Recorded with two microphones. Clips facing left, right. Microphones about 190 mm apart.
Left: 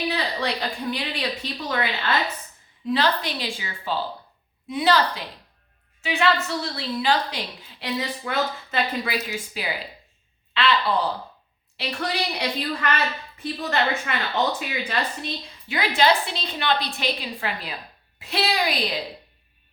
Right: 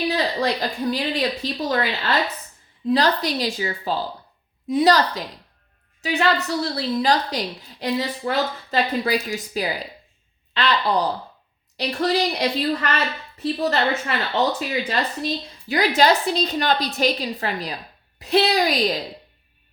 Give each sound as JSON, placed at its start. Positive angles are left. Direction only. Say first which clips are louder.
{"t": 0.1, "sound": "a woman's voice", "louder": "right 4 dB", "side_deg": -35}